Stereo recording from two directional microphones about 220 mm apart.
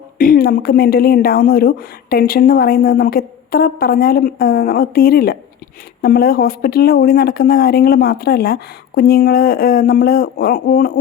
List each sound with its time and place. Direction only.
0.2 s a woman's voice: 40° left (ahead or behind)